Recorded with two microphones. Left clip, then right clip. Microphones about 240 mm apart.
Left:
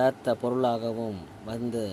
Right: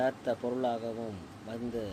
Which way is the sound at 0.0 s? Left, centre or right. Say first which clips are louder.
Left 6 dB; left.